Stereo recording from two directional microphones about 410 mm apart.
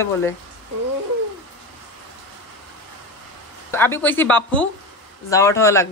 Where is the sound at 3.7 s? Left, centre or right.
Centre.